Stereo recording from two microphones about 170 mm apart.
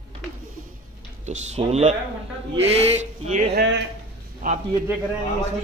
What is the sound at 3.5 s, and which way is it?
Speech, 90° right.